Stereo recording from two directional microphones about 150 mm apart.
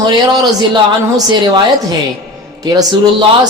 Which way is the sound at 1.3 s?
30° right (ahead or behind).